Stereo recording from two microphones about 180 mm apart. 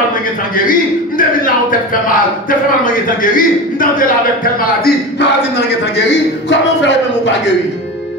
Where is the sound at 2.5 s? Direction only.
50° left (ahead or behind); by 7.3 s 80° left.